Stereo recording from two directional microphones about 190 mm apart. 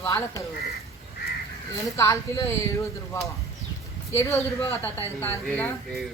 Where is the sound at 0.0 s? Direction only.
15° left (ahead or behind).